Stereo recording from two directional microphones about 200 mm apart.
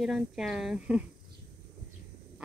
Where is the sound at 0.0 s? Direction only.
Centre (ahead or behind).